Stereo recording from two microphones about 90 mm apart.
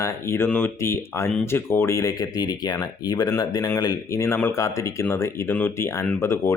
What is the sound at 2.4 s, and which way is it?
A man's voice, 50° left (ahead or behind).